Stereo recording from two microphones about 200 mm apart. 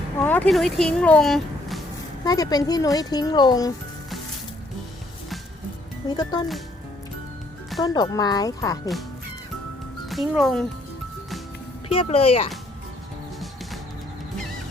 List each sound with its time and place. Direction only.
0.2 s speech: 5° left (ahead or behind)
2.2 s a child's voice: 20° left (ahead or behind)
6.1 s a child's voice: 20° left (ahead or behind)
7.8 s a child's voice: 20° left (ahead or behind)
10.1 s speech: centre (ahead or behind)
11.9 s a child's voice: 30° left (ahead or behind)